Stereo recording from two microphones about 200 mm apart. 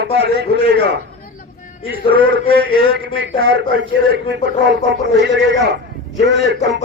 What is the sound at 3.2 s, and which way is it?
Speech, 60° right (ahead or behind).